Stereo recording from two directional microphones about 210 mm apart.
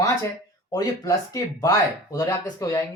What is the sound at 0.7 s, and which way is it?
Speech, 15° left (ahead or behind).